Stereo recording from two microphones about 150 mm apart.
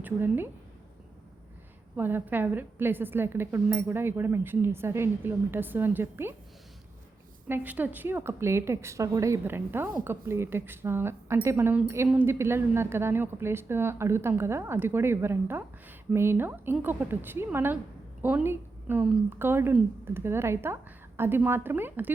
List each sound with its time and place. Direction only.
0.0 s a woman's voice: 15° right (ahead or behind)
2.0 s speech: 15° right (ahead or behind)
7.4 s a woman's voice: 10° right (ahead or behind)